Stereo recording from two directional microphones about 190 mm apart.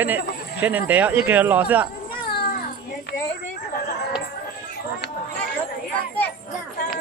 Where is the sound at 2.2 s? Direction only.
55° left (ahead or behind).